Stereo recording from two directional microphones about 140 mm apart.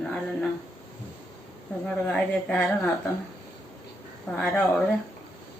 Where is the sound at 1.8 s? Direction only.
5° left (ahead or behind).